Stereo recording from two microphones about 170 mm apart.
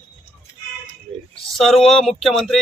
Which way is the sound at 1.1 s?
35° right (ahead or behind).